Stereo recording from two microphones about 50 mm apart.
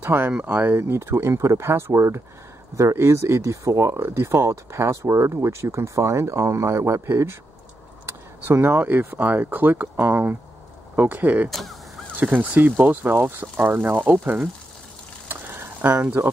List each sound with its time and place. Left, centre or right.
0.0 s speech: right
0.4 s speech: right
0.8 s speech: right
4.0 s speech: right
8.5 s speech: right
8.7 s speech: right
15.2 s a sound: right
16.2 s speech: right